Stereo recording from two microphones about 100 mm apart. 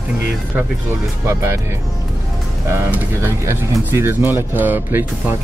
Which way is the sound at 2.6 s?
25° right (ahead or behind).